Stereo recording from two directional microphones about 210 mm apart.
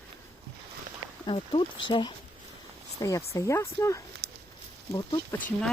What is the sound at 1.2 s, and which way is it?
Speech, 25° left (ahead or behind).